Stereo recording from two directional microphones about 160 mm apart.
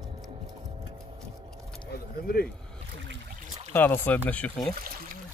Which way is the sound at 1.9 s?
75° left (ahead or behind).